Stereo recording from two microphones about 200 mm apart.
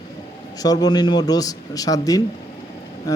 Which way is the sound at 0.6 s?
20° left (ahead or behind).